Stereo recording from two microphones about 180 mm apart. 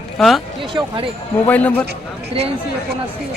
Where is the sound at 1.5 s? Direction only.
10° left (ahead or behind).